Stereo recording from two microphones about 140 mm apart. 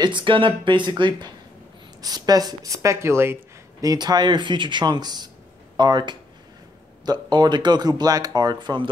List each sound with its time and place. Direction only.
0.0 s speech: 35° right (ahead or behind); by 3.3 s 15° right (ahead or behind)
3.8 s speech: 30° right (ahead or behind)